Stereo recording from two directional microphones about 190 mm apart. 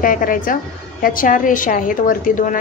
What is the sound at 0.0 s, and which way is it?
A woman's voice, 45° left (ahead or behind).